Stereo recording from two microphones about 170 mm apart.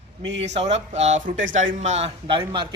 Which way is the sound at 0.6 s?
40° right (ahead or behind).